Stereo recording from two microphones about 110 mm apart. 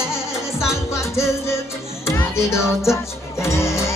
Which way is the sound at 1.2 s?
25° left (ahead or behind).